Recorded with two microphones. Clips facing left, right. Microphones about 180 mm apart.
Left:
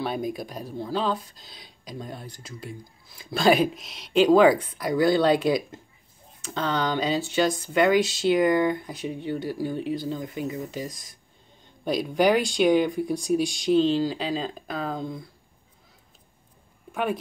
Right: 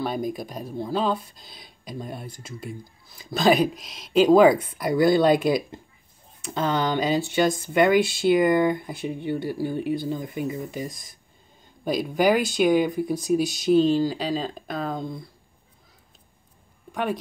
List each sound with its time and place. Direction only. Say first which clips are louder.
0.0 s speech: right 1 dB; centre (ahead or behind)
0.7 s speech: right 4 dB; 15° right (ahead or behind)
0.9 s speech: right 2 dB; 5° right (ahead or behind)
7.9 s speech: right 1 dB; 55° right (ahead or behind)
8.3 s speech: right 2 dB; 5° right (ahead or behind)
16.9 s speech: even; 5° left (ahead or behind)